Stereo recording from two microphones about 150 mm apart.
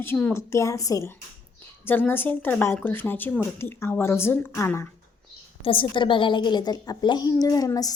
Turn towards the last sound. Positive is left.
turn(degrees=25)  # may be behind; listen again after turning